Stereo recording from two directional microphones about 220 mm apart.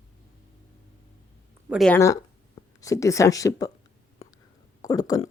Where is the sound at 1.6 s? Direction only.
Centre (ahead or behind).